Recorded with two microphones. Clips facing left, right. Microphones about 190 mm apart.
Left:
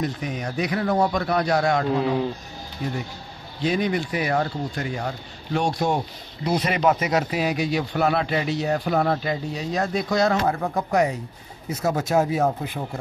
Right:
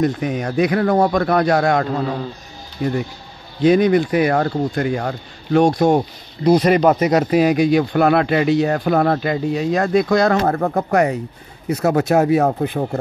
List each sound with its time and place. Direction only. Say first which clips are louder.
0.0 s speech: right 8 dB; 50° right (ahead or behind)
3.6 s speech: right 10 dB; 50° right (ahead or behind)